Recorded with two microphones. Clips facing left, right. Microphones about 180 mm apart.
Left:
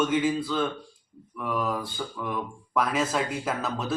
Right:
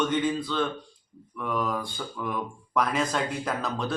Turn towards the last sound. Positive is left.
turn(degrees=5)  # may be behind; listen again after turning